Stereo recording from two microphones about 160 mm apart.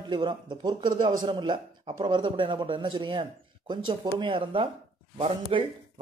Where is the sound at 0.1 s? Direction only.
30° right (ahead or behind).